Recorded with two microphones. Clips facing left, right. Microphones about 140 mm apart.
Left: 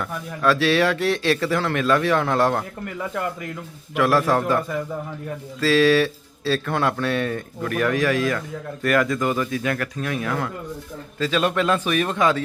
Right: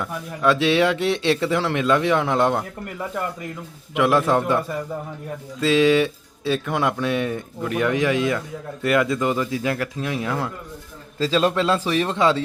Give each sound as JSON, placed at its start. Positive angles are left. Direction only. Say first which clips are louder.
{"t": 0.4, "sound": "speech", "louder": "right 1 dB", "side_deg": -20}
{"t": 3.9, "sound": "speech", "louder": "right 1 dB", "side_deg": -20}